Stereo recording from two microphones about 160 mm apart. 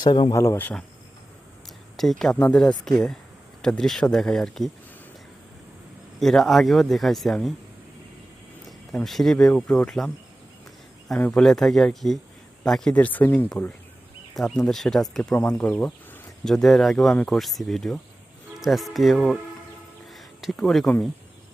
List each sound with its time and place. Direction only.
0.0 s speech: 25° left (ahead or behind); by 0.9 s 10° left (ahead or behind)
2.0 s speech: centre (ahead or behind)
6.1 s speech: centre (ahead or behind)
8.6 s speech: centre (ahead or behind)
11.2 s speech: 5° left (ahead or behind)